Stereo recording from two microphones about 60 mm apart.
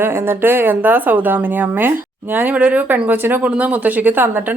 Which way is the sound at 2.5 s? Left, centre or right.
Right.